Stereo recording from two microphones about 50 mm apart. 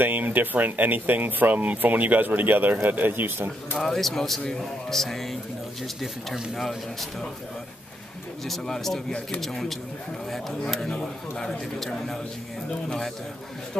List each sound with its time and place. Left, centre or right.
0.0 s speech: right
3.7 s a man's voice: centre
8.5 s a man's voice: centre